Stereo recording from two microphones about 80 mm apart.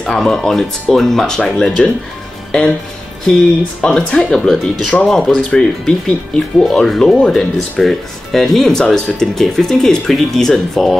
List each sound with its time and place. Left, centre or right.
0.0 s speech: centre
3.8 s speech: centre